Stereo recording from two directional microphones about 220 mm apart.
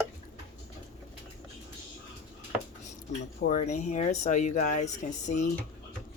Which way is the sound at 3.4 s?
35° left (ahead or behind).